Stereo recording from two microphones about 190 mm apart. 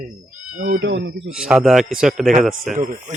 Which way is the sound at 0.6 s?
45° right (ahead or behind).